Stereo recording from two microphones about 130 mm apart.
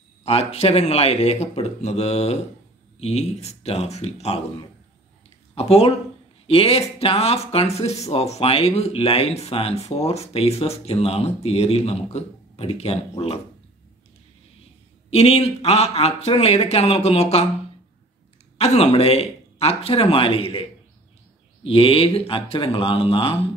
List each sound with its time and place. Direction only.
0.2 s speech: 50° left (ahead or behind)
5.5 s speech: 50° left (ahead or behind)
15.0 s speech: 55° left (ahead or behind)
18.6 s speech: 50° left (ahead or behind)
21.6 s speech: 45° left (ahead or behind)